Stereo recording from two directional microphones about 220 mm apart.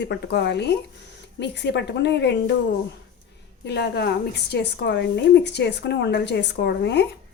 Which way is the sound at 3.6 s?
50° left (ahead or behind).